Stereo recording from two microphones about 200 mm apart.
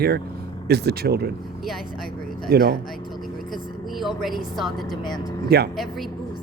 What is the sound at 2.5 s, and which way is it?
Speech, 50° right (ahead or behind).